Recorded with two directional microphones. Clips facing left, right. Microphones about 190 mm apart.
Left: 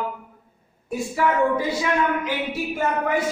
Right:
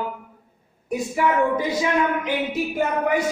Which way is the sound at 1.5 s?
20° right (ahead or behind).